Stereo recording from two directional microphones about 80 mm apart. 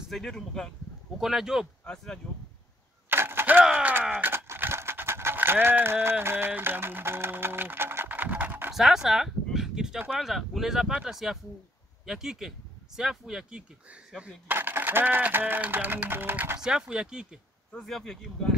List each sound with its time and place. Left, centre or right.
0.1 s speech: centre
1.1 s speech: centre
3.1 s vehicle: right
3.6 s a sound: centre
4.3 s a sound: right
8.7 s a sound: centre
10.1 s speech: centre
14.5 s speech: right
16.6 s speech: centre
17.7 s speech: centre